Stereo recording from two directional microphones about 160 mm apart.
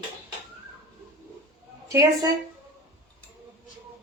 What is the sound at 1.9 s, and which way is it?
Speech, 20° right (ahead or behind).